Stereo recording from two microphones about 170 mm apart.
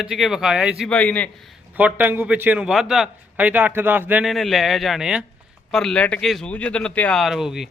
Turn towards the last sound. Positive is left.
turn(degrees=0)  # may be behind; listen again after turning